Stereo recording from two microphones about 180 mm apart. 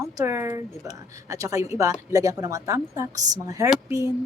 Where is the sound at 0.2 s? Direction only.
15° right (ahead or behind).